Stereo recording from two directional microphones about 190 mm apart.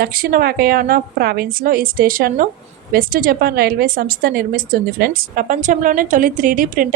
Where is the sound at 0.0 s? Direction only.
50° right (ahead or behind).